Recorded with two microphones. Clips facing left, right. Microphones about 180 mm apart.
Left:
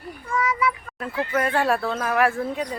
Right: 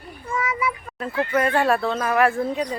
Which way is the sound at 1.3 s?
Centre (ahead or behind).